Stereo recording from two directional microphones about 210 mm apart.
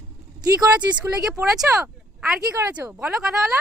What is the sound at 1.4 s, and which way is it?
Speech, centre (ahead or behind).